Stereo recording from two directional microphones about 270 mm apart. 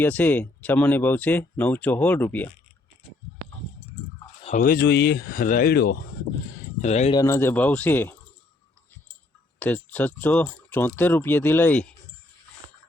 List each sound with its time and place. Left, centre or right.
0.0 s speech: centre
4.4 s speech: left
6.8 s speech: left
7.2 s speech: centre
9.6 s speech: centre